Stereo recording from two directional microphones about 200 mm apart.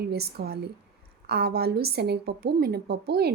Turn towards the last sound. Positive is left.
turn(degrees=-50)  # may be behind; listen again after turning